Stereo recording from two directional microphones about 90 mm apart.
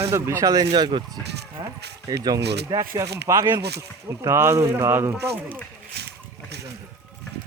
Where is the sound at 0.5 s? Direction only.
50° right (ahead or behind).